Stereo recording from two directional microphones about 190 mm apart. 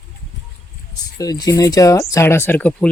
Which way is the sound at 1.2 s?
20° left (ahead or behind).